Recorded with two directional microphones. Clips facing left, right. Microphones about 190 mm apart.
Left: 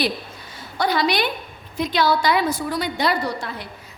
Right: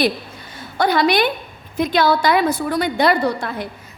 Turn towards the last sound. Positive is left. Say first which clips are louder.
# right 6 dB
turn(degrees=-55)  # may be behind; listen again after turning